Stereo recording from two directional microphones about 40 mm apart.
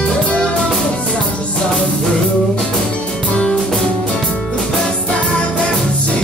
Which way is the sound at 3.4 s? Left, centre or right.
Left.